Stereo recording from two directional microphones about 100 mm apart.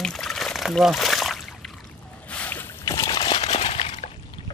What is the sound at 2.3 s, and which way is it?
Boat, 15° left (ahead or behind).